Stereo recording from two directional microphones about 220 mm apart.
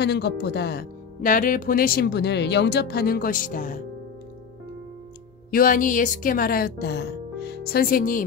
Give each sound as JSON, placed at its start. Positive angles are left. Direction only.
{"t": 0.0, "sound": "speech", "side_deg": 50}
{"t": 5.5, "sound": "speech", "side_deg": 40}